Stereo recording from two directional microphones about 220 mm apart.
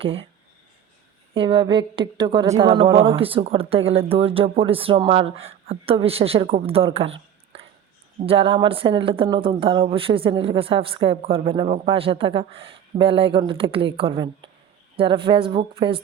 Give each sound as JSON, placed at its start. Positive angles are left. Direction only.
{"t": 0.0, "sound": "a woman's voice", "side_deg": -25}
{"t": 1.3, "sound": "a woman's voice", "side_deg": -25}